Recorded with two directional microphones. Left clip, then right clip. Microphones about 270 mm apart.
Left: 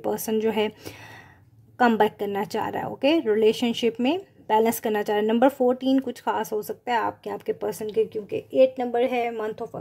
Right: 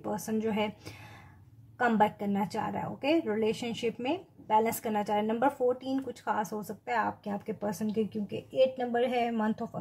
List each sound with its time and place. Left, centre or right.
0.0 s a woman's voice: left